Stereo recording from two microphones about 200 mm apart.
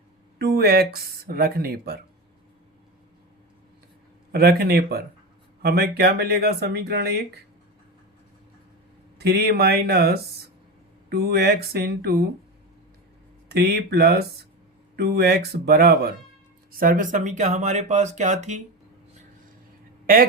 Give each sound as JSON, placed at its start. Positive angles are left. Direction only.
{"t": 0.3, "sound": "speech", "side_deg": -50}
{"t": 4.3, "sound": "speech", "side_deg": -50}
{"t": 9.1, "sound": "speech", "side_deg": -55}
{"t": 13.5, "sound": "speech", "side_deg": -55}